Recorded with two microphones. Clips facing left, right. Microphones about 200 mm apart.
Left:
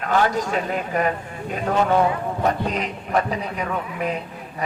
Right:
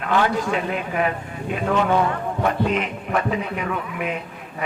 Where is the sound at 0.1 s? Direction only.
40° left (ahead or behind).